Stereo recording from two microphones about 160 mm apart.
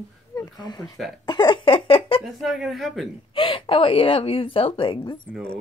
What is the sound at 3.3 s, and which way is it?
Speech, 30° left (ahead or behind).